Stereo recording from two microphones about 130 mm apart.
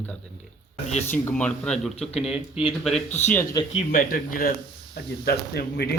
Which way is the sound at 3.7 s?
90° left.